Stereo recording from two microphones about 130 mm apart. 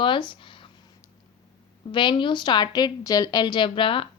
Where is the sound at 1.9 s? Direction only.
40° left (ahead or behind).